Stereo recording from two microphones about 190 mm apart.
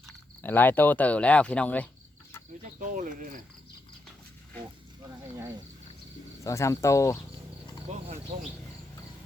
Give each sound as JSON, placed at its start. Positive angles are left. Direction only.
{"t": 0.4, "sound": "speech", "side_deg": 10}
{"t": 2.8, "sound": "speech", "side_deg": -40}
{"t": 6.4, "sound": "speech", "side_deg": 15}
{"t": 7.9, "sound": "a sound", "side_deg": -35}